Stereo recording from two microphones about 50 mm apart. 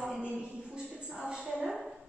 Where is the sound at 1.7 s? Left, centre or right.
Centre.